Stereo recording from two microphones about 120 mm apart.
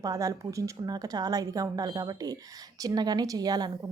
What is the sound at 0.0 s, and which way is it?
A woman's voice, 30° right (ahead or behind).